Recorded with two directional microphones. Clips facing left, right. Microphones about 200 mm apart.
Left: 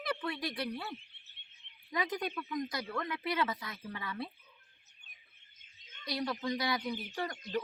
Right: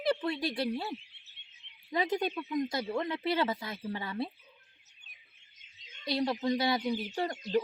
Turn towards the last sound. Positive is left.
turn(degrees=-30)  # may be behind; listen again after turning